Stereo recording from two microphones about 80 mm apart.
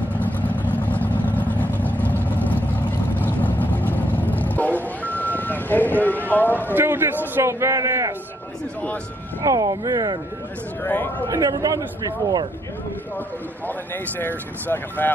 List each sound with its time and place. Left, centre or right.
0.1 s vehicle: centre
6.7 s a man's voice: right
9.4 s speech: right
10.8 s speech: left
11.2 s speech: right
13.7 s speech: left